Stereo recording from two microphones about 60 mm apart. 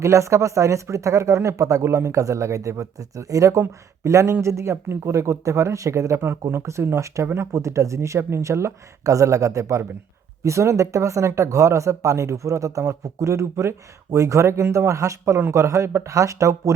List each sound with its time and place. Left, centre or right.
0.0 s speech: right
6.5 s speech: right